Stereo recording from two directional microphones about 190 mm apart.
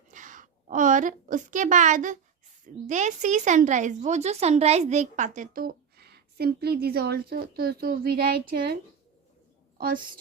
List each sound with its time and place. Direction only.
0.1 s a woman's voice: 45° right (ahead or behind)